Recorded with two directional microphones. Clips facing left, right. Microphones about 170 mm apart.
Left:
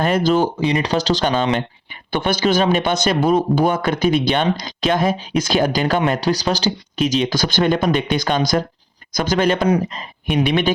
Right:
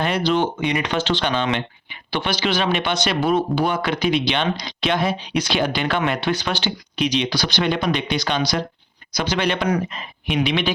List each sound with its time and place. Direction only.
0.0 s speech: 45° left (ahead or behind)